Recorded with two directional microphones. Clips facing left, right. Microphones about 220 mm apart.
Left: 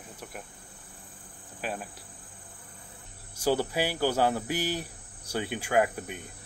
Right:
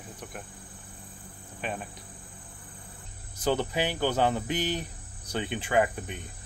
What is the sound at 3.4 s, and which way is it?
Speech, 10° left (ahead or behind).